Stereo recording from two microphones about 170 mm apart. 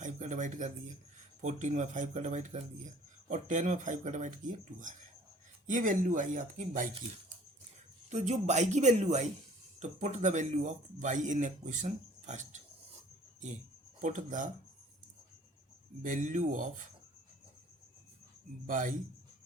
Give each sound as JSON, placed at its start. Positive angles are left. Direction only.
{"t": 0.0, "sound": "speech", "side_deg": -45}
{"t": 5.6, "sound": "speech", "side_deg": -50}
{"t": 8.1, "sound": "speech", "side_deg": -45}
{"t": 14.0, "sound": "speech", "side_deg": -45}
{"t": 16.0, "sound": "speech", "side_deg": -50}
{"t": 18.6, "sound": "speech", "side_deg": -50}